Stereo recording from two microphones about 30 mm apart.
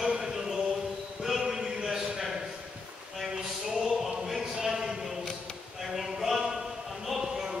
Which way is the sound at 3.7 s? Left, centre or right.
Centre.